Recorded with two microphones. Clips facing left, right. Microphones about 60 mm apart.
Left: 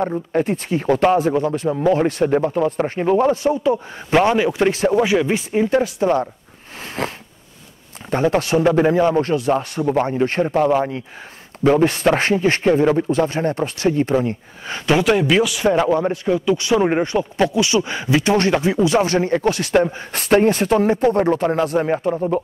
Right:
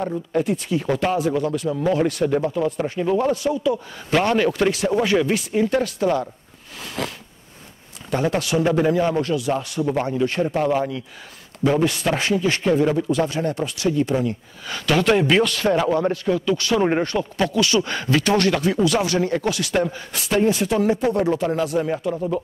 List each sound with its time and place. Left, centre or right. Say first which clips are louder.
0.0 s speech: left 3 dB; left
4.1 s a man's voice: left 3 dB; centre
4.6 s speech: left 3 dB; left
4.9 s speech: left 2 dB; centre
7.0 s a sound: left 3 dB; left
8.1 s speech: left 4 dB; left
15.0 s speech: left 1 dB; centre
15.6 s speech: left 2 dB; centre
18.9 s speech: left 4 dB; left
20.1 s speech: left 5 dB; left